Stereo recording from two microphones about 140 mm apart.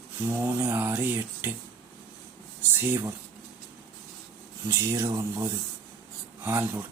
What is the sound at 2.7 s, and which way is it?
Speech, 15° right (ahead or behind).